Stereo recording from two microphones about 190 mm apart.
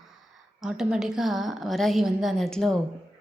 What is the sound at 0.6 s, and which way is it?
Speech, 5° right (ahead or behind).